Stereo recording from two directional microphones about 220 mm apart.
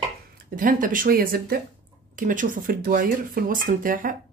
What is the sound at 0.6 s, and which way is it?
Speech, 40° right (ahead or behind).